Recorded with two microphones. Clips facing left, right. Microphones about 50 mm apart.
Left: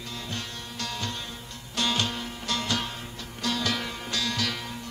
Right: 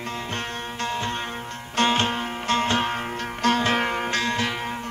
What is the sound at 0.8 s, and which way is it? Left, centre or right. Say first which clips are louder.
Music: right 7 dB; right.